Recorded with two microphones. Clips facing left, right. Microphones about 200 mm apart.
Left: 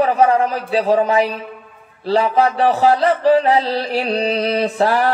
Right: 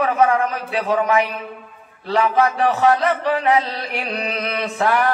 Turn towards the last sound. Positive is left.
turn(degrees=30)  # may be behind; listen again after turning